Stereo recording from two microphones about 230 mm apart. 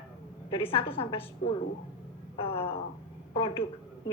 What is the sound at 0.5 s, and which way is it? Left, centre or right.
A woman's voice, left.